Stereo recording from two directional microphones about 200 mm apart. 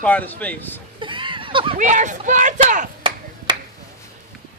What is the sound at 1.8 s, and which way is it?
Speech, 40° right (ahead or behind).